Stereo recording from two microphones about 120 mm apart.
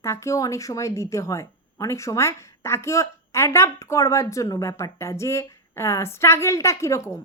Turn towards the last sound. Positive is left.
turn(degrees=25)  # may be behind; listen again after turning